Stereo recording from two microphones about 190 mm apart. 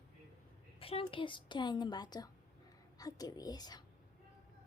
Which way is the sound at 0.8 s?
30° left (ahead or behind).